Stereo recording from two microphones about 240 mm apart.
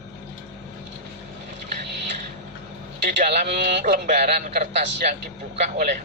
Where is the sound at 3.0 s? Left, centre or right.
Right.